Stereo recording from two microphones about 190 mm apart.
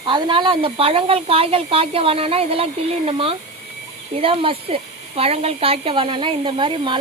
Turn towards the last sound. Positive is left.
turn(degrees=-25)  # may be behind; listen again after turning